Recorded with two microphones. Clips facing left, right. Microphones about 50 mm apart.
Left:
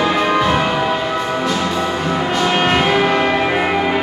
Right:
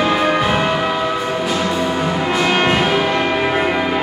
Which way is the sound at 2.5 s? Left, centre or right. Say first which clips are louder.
Even; centre.